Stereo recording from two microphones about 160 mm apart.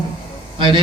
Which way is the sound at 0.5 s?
30° right (ahead or behind).